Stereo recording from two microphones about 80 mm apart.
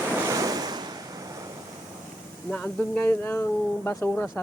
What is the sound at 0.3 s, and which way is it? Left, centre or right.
Waves, right.